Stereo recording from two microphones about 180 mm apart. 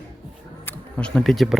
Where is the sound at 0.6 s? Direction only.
5° left (ahead or behind).